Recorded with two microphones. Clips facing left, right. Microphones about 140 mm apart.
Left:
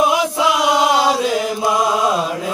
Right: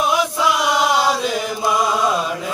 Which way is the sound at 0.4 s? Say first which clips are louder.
Left 4 dB; 20° left (ahead or behind).